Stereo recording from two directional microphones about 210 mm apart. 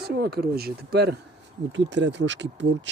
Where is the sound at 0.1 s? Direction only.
50° right (ahead or behind).